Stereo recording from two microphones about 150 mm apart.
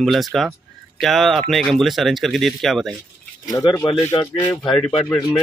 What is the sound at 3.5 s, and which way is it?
Speech, 20° left (ahead or behind).